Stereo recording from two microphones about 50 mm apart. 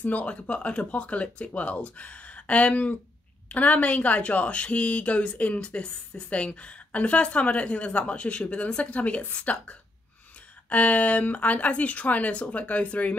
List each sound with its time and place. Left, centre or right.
0.0 s speech: left